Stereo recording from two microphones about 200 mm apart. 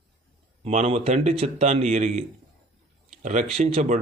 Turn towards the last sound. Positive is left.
turn(degrees=-35)  # may be behind; listen again after turning